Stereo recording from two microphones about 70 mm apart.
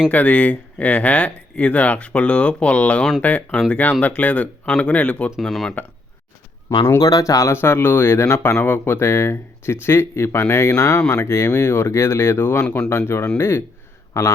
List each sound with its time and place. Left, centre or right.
0.1 s speech: left
5.4 s speech: centre
7.0 s speech: left
7.5 s speech: left
12.6 s speech: centre
14.1 s speech: left